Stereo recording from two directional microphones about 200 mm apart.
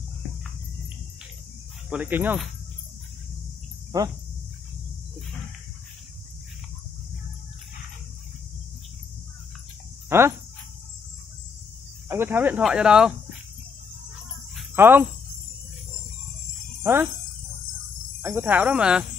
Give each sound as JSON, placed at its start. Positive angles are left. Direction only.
{"t": 1.9, "sound": "speech", "side_deg": -10}
{"t": 3.9, "sound": "speech", "side_deg": -15}
{"t": 10.0, "sound": "speech", "side_deg": -10}
{"t": 12.1, "sound": "speech", "side_deg": -10}
{"t": 14.8, "sound": "speech", "side_deg": -10}
{"t": 16.8, "sound": "speech", "side_deg": -10}
{"t": 18.2, "sound": "speech", "side_deg": -10}